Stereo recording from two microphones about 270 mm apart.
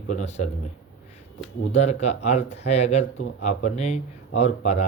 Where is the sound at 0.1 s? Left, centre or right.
Left.